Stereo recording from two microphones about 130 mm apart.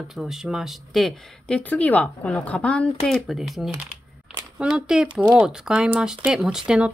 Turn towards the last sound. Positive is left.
turn(degrees=-5)  # may be behind; listen again after turning